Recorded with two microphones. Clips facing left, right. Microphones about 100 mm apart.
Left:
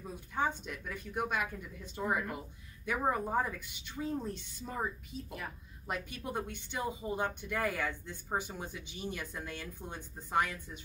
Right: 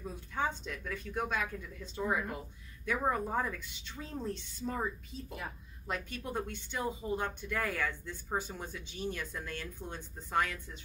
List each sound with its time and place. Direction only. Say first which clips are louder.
0.0 s speech: left 1 dB; 15° left (ahead or behind)
5.9 s speech: even; 15° left (ahead or behind)